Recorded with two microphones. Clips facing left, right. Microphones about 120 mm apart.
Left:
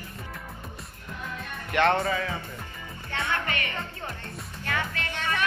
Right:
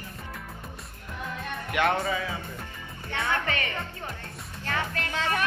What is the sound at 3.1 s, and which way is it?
Speech, 25° right (ahead or behind).